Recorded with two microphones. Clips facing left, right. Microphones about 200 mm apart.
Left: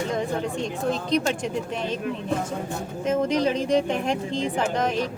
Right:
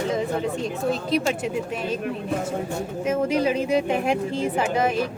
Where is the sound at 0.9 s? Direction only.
5° right (ahead or behind).